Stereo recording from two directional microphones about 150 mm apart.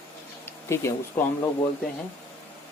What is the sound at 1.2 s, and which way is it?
Speech, 15° left (ahead or behind).